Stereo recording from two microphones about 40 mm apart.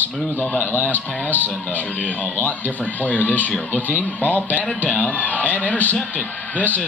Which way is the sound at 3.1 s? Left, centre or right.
Left.